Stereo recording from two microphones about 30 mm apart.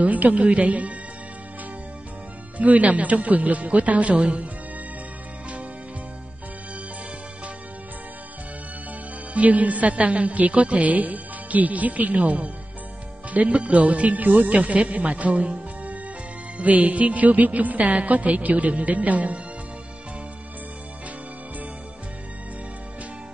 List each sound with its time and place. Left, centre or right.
0.0 s a woman's voice: right
2.5 s a woman's voice: right
4.1 s speech: right
9.3 s a woman's voice: right